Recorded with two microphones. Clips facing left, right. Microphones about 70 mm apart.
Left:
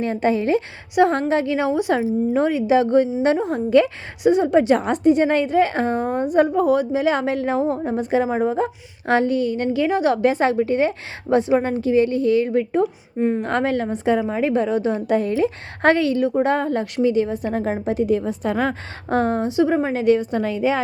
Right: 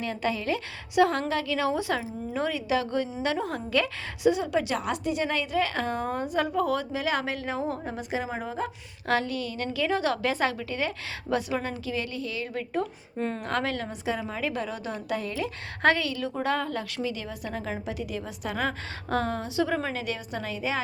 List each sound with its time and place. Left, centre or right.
0.0 s a woman's voice: left
12.8 s a woman's voice: centre
13.4 s a woman's voice: left